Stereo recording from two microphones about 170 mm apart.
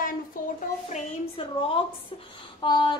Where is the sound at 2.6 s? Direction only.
25° left (ahead or behind).